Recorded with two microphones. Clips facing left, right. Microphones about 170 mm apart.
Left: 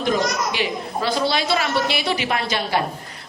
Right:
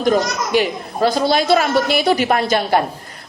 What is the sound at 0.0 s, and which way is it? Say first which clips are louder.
A man's voice: right 4 dB; 45° right (ahead or behind).